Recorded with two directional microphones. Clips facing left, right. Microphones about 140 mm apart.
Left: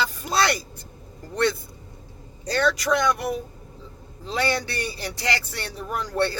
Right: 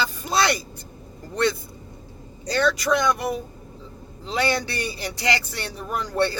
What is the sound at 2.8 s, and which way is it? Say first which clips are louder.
A woman's voice: right 1 dB; 20° right (ahead or behind).